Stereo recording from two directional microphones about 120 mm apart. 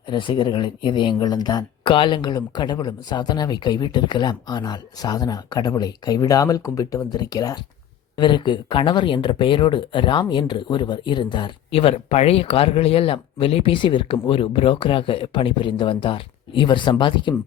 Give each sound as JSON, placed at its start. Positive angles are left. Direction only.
{"t": 0.1, "sound": "speech", "side_deg": 40}